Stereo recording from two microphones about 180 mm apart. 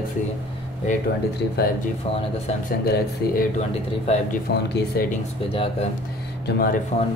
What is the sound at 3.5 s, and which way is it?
Speech, 35° left (ahead or behind).